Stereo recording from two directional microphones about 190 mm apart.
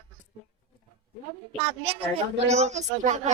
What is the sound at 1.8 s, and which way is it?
A woman's voice, 30° right (ahead or behind).